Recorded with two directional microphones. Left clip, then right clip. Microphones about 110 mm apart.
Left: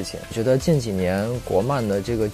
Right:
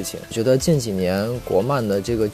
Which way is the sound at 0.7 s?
35° right (ahead or behind).